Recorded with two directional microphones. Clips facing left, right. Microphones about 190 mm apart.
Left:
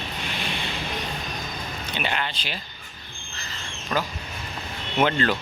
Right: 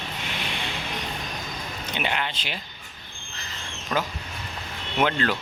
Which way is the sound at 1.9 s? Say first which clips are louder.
Right 1 dB; 15° right (ahead or behind).